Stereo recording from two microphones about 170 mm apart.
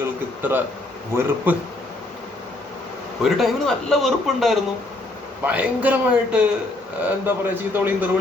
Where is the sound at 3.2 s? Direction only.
Centre (ahead or behind).